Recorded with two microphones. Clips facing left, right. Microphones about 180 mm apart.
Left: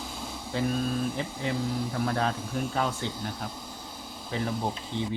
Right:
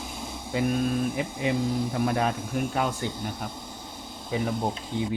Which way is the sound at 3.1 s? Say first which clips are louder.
Right 2 dB; 20° right (ahead or behind).